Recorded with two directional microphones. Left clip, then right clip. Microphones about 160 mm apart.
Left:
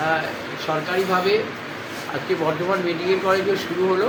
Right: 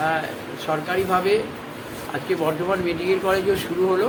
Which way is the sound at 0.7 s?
15° right (ahead or behind).